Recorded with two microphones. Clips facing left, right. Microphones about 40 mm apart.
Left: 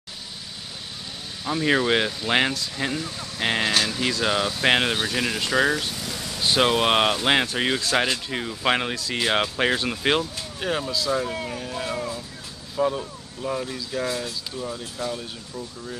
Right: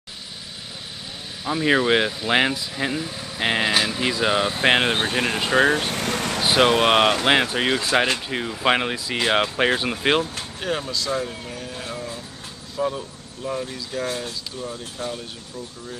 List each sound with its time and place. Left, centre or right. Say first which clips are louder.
1.4 s speech: right 2 dB; centre
4.9 s speech: right 3 dB; right
5.9 s vehicle: right 8 dB; right
6.4 s speech: right 2 dB; right
10.6 s speech: left 1 dB; centre
15.0 s speech: left 1 dB; right